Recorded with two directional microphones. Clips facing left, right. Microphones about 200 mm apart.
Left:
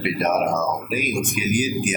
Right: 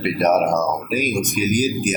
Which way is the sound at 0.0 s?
40° right (ahead or behind).